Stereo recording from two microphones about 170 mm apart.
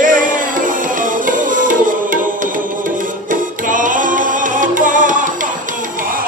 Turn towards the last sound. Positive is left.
turn(degrees=-50)  # may be behind; listen again after turning